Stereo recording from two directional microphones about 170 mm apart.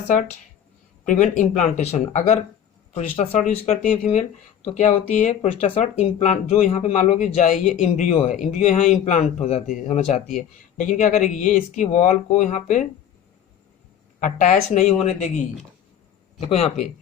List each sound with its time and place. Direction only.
0.1 s speech: 45° left (ahead or behind)
14.2 s speech: 50° left (ahead or behind)
16.5 s speech: 35° left (ahead or behind)